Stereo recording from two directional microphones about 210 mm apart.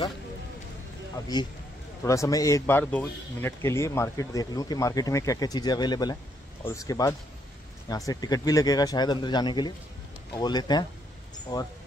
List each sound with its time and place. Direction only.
2.0 s speech: 15° left (ahead or behind)